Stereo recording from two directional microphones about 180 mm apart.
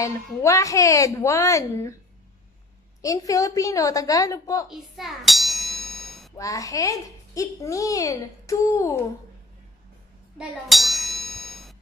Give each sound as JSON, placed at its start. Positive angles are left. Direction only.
{"t": 0.0, "sound": "a child's voice", "side_deg": 15}
{"t": 3.0, "sound": "a woman's voice", "side_deg": 20}
{"t": 4.6, "sound": "ding", "side_deg": 0}
{"t": 6.3, "sound": "a child's voice", "side_deg": 20}
{"t": 10.3, "sound": "ding", "side_deg": 0}